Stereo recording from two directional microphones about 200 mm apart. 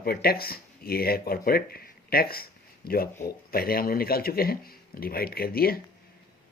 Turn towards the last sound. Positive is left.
turn(degrees=50)  # may be behind; listen again after turning